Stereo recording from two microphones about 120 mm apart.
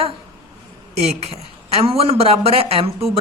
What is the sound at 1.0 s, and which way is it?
Speech, 60° right (ahead or behind).